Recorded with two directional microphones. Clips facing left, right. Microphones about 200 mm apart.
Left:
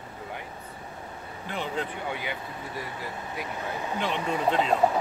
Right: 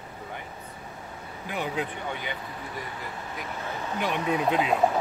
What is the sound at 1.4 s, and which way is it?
Speech, 10° right (ahead or behind).